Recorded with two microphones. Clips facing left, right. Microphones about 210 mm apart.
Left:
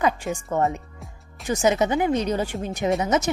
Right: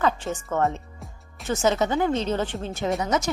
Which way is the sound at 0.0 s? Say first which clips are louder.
Left 1 dB; 15° left (ahead or behind).